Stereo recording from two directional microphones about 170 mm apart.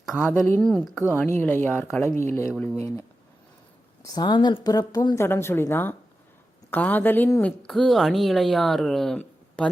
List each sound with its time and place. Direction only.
0.2 s speech: 10° left (ahead or behind)
4.0 s a woman's voice: 25° left (ahead or behind)
7.6 s speech: centre (ahead or behind)